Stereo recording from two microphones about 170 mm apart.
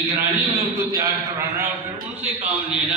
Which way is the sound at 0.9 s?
20° right (ahead or behind).